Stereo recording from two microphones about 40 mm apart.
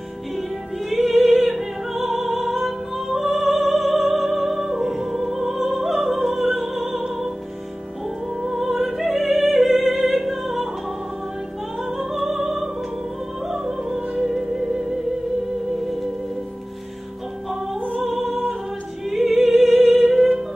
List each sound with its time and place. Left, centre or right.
0.4 s music: centre
8.4 s music: centre
11.8 s music: centre
17.5 s music: centre
17.7 s music: right
18.0 s music: centre
19.0 s opera: centre